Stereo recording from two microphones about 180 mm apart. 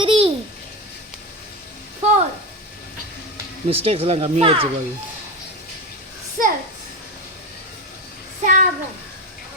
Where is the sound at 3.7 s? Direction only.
30° right (ahead or behind).